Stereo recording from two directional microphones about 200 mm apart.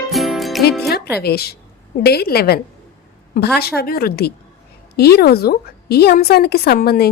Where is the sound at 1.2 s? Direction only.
50° left (ahead or behind).